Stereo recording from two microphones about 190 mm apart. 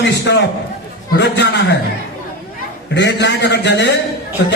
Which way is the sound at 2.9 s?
65° left (ahead or behind).